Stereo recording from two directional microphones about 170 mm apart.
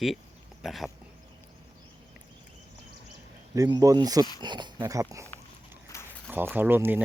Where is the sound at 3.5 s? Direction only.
20° right (ahead or behind).